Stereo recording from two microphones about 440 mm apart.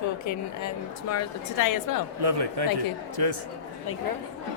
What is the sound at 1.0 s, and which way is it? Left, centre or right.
Speech, left.